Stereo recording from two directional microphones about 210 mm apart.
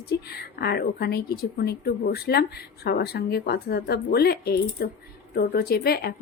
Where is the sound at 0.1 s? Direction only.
50° left (ahead or behind).